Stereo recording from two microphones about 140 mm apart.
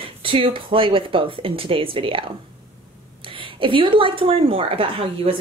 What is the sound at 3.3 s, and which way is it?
A woman's voice, 40° right (ahead or behind).